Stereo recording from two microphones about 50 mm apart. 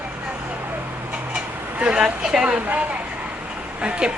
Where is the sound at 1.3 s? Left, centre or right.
Centre.